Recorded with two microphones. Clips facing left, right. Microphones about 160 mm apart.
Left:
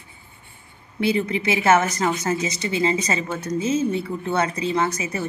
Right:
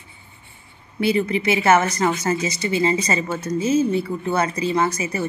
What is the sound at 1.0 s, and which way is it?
Speech, centre (ahead or behind).